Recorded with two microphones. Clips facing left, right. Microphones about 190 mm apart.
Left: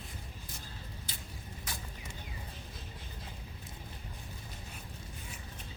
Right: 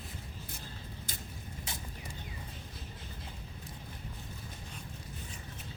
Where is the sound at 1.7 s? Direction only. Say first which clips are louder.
Left 1 dB; 25° right (ahead or behind).